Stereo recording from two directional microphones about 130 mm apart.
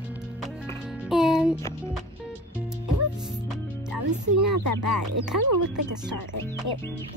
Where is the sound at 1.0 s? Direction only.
5° right (ahead or behind).